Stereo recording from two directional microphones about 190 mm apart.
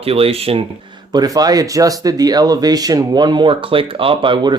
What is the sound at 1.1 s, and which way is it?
Speech, 20° right (ahead or behind).